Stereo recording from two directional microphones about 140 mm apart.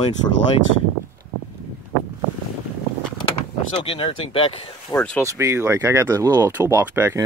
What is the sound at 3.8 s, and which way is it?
Speech, 40° left (ahead or behind).